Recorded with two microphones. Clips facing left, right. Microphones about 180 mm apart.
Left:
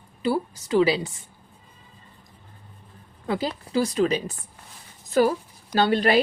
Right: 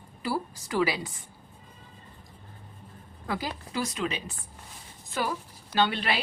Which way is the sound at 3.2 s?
25° left (ahead or behind).